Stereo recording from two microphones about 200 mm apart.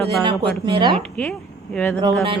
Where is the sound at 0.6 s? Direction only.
25° right (ahead or behind).